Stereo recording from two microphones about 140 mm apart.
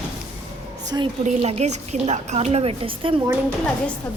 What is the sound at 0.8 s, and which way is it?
Speech, 30° right (ahead or behind).